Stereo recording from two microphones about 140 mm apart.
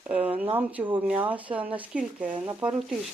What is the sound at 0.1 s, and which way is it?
Speech, 10° right (ahead or behind).